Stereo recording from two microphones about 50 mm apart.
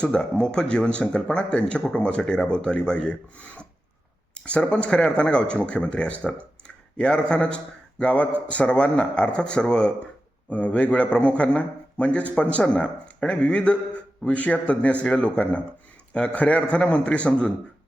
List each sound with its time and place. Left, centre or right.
0.0 s a man's voice: centre